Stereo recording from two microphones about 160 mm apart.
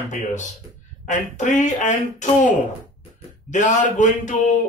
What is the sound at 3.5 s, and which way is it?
Speech, 50° left (ahead or behind).